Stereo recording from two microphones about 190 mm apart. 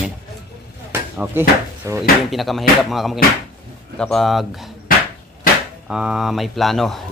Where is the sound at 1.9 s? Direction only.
15° right (ahead or behind).